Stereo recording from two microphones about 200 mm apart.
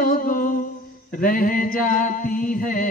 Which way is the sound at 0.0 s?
45° left (ahead or behind).